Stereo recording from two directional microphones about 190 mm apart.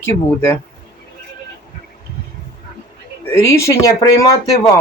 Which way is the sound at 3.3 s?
15° left (ahead or behind).